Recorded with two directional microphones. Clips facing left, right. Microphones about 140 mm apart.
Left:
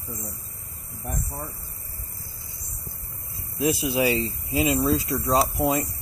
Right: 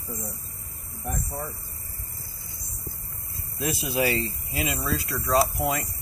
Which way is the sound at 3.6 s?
15° left (ahead or behind).